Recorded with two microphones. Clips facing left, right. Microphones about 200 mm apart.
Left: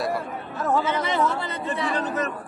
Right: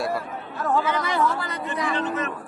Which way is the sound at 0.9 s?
25° left (ahead or behind).